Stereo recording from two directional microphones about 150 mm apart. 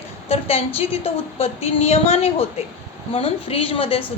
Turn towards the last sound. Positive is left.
turn(degrees=40)  # may be behind; listen again after turning